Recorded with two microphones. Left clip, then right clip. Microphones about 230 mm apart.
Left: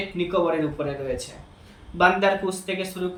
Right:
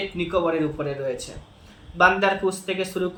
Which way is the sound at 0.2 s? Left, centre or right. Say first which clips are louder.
Even; centre.